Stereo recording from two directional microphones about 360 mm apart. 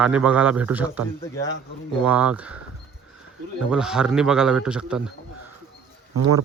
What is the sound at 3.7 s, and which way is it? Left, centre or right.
Speech, centre.